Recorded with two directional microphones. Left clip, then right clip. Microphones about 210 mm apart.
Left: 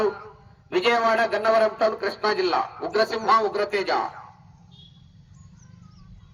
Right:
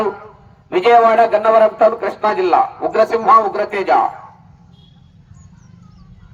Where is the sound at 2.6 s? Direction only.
45° right (ahead or behind).